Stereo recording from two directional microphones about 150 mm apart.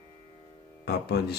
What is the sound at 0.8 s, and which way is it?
Speech, 90° left.